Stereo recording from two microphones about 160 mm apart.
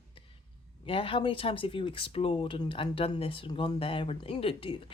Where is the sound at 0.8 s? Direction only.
35° left (ahead or behind).